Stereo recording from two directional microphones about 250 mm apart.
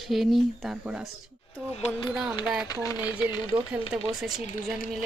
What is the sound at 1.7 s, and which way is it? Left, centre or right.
Speech, centre.